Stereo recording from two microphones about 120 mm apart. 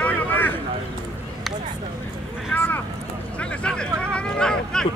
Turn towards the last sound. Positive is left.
turn(degrees=5)  # may be behind; listen again after turning